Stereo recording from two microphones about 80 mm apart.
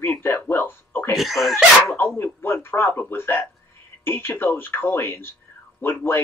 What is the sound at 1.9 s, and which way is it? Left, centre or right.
Speech, left.